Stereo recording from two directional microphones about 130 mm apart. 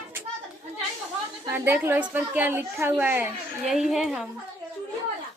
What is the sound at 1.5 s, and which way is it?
A woman's voice, 15° right (ahead or behind).